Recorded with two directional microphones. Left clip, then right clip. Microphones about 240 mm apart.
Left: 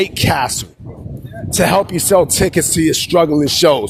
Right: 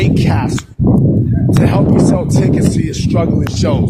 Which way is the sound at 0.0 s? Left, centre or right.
Left.